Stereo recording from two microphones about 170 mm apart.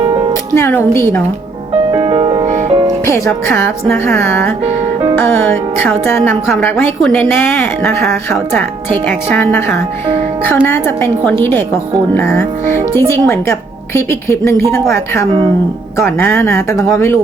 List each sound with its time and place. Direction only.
0.0 s music: 30° right (ahead or behind)
0.5 s speech: 15° left (ahead or behind)
1.9 s music: 30° right (ahead or behind)
3.1 s a woman's voice: 15° left (ahead or behind)